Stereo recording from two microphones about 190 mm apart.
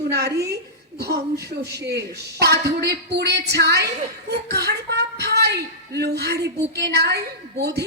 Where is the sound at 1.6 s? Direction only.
60° right (ahead or behind).